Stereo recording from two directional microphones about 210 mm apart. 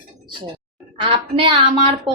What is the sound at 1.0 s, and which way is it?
Speech, 25° right (ahead or behind).